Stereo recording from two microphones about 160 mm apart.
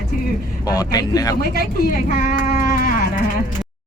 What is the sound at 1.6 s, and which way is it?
Speech, 65° left (ahead or behind).